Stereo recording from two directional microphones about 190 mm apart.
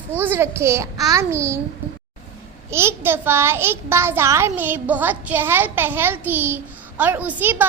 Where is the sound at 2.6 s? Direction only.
15° right (ahead or behind).